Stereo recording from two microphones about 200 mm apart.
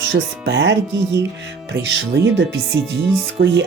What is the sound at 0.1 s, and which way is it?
Speech, 60° right (ahead or behind).